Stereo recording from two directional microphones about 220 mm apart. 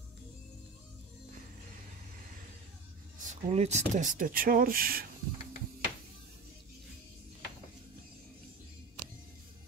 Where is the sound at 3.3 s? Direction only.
30° right (ahead or behind).